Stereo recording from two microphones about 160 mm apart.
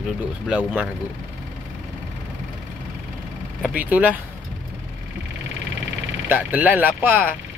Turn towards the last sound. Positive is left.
turn(degrees=-10)  # may be behind; listen again after turning